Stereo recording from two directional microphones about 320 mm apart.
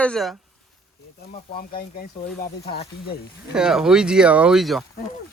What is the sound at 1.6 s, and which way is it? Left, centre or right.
Speech, left.